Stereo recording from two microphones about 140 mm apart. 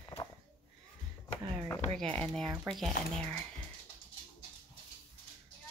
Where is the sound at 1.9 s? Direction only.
5° left (ahead or behind).